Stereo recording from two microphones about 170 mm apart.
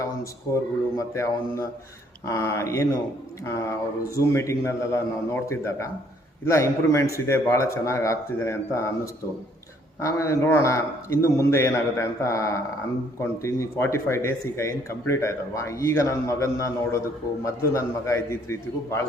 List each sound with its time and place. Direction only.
0.5 s a man's voice: 15° left (ahead or behind)
10.0 s a man's voice: 20° left (ahead or behind)